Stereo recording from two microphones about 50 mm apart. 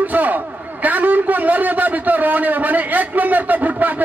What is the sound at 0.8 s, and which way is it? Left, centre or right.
A man's voice, right.